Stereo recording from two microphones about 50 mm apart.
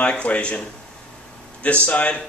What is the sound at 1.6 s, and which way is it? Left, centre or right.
Speech, left.